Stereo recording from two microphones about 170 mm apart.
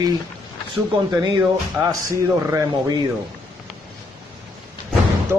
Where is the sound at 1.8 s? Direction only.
15° right (ahead or behind).